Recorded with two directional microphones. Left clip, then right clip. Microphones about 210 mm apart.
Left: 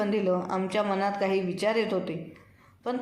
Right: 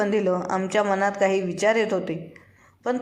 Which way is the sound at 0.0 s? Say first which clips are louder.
Right 4 dB; 20° right (ahead or behind).